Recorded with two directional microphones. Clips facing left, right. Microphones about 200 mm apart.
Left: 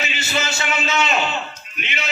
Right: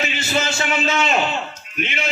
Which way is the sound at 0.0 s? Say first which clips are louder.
Right 3 dB; 50° right (ahead or behind).